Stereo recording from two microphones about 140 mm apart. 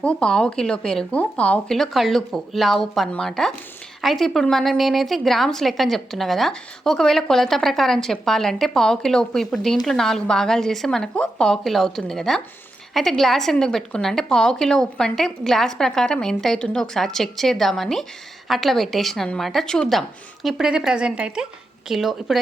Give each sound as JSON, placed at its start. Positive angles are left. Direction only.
{"t": 0.0, "sound": "a woman's voice", "side_deg": 5}